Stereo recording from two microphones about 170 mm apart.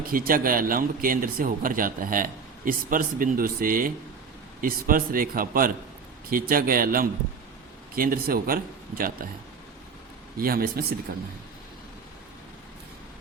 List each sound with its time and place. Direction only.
0.1 s speech: 55° right (ahead or behind)
10.3 s speech: 60° right (ahead or behind)